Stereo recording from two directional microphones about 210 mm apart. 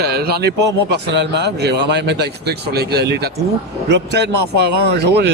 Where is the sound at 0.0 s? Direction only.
50° right (ahead or behind).